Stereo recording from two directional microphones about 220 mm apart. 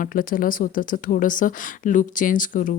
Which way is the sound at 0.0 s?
40° left (ahead or behind).